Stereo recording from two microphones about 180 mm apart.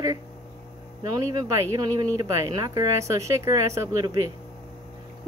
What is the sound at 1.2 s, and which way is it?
Speech, 15° right (ahead or behind).